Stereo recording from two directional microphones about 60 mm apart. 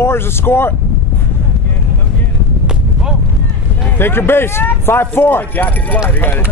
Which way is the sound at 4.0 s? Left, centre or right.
Left.